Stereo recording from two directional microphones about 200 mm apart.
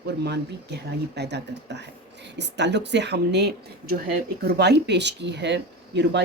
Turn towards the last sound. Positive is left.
turn(degrees=-60)  # may be behind; listen again after turning